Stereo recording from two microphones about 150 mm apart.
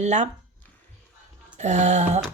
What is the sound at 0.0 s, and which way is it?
Speech, 50° right (ahead or behind).